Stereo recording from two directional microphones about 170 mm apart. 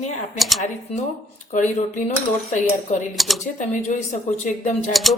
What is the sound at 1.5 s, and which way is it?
Speech, 45° left (ahead or behind).